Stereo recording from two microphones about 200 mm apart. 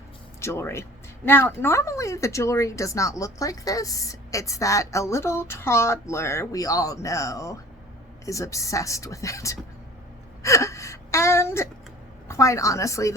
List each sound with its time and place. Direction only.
0.4 s speech: 10° left (ahead or behind)